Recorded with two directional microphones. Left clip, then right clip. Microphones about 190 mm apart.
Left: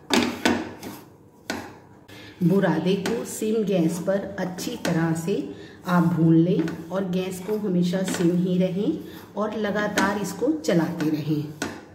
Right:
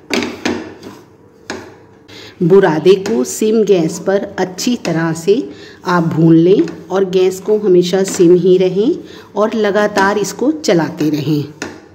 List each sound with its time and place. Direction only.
2.6 s a woman's voice: 55° right (ahead or behind)